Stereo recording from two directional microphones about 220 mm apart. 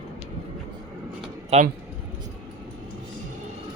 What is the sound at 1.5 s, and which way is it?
Speech, 30° right (ahead or behind).